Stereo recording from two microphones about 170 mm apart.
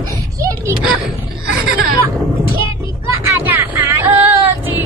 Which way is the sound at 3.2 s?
15° right (ahead or behind).